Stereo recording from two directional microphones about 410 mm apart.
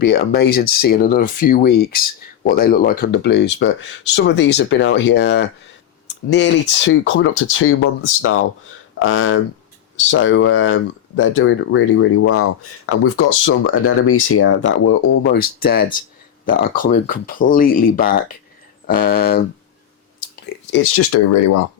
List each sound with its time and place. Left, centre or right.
0.0 s speech: left
20.7 s speech: left